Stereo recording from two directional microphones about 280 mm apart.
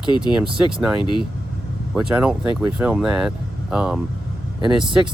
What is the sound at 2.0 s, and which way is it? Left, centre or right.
Speech, centre.